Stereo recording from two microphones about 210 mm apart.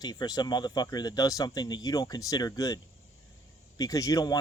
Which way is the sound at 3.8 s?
15° left (ahead or behind).